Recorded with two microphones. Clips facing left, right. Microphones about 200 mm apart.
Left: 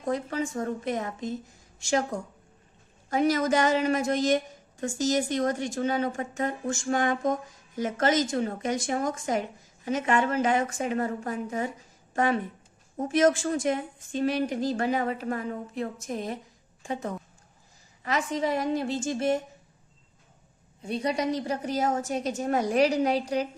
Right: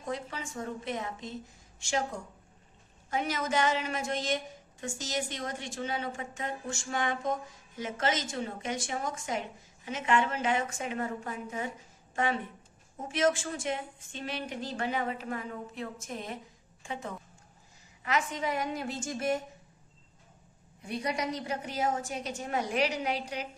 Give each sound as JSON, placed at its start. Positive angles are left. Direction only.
{"t": 0.0, "sound": "a woman's voice", "side_deg": 45}
{"t": 3.1, "sound": "a woman's voice", "side_deg": 40}
{"t": 20.8, "sound": "a woman's voice", "side_deg": 25}